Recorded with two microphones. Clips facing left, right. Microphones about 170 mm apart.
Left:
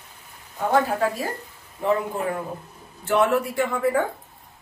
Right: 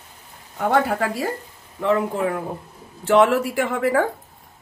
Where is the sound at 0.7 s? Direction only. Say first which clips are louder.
Right 1 dB; 80° right.